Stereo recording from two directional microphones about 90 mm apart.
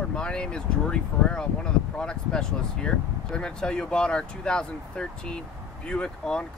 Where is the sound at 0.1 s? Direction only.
10° left (ahead or behind).